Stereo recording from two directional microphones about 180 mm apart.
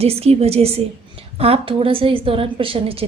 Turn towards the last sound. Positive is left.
turn(degrees=-30)  # may be behind; listen again after turning